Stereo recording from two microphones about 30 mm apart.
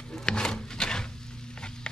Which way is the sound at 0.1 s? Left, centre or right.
Left.